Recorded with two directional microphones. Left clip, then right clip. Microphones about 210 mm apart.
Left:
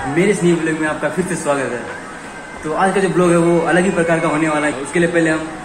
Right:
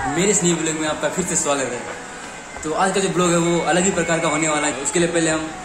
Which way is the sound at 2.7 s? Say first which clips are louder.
Left 4 dB; 10° right (ahead or behind).